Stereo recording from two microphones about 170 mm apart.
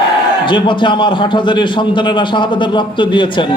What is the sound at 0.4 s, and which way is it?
A man's voice, 30° left (ahead or behind).